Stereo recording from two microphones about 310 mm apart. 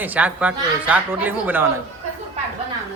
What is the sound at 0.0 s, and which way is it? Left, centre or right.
Speech, centre.